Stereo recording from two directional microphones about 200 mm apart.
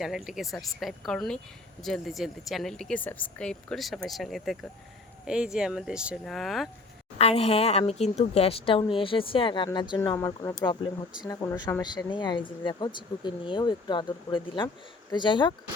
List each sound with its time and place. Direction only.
0.0 s speech: centre (ahead or behind)
7.2 s speech: 30° left (ahead or behind)